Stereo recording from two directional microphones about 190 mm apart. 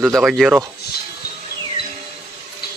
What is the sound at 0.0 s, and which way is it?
Speech, centre (ahead or behind).